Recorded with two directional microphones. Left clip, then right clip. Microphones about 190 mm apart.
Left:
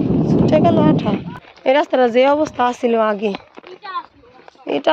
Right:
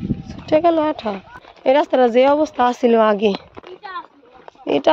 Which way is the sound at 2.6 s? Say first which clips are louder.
Right 3 dB; 20° right (ahead or behind).